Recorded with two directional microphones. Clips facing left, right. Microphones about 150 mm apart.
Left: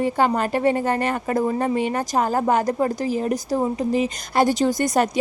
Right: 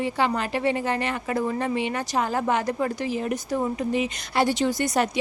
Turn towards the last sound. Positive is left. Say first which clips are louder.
# left 4 dB
turn(degrees=45)  # may be behind; listen again after turning